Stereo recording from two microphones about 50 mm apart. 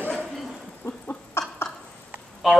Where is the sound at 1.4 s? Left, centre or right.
Left.